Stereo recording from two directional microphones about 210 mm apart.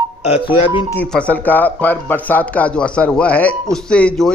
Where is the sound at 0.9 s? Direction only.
5° left (ahead or behind).